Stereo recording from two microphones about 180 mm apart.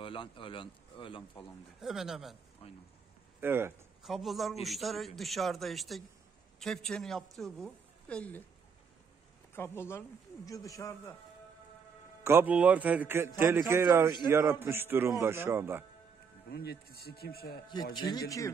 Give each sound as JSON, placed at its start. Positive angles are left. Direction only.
{"t": 0.0, "sound": "speech", "side_deg": 30}
{"t": 1.8, "sound": "a man's voice", "side_deg": 0}
{"t": 2.6, "sound": "speech", "side_deg": 30}
{"t": 3.3, "sound": "speech", "side_deg": -10}
{"t": 4.0, "sound": "a man's voice", "side_deg": 0}
{"t": 9.6, "sound": "speech", "side_deg": 15}
{"t": 12.2, "sound": "a man's voice", "side_deg": -15}
{"t": 16.4, "sound": "speech", "side_deg": 60}
{"t": 17.9, "sound": "a man's voice", "side_deg": 20}